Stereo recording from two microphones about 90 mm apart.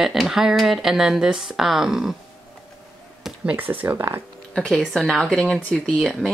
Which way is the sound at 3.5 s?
20° right (ahead or behind).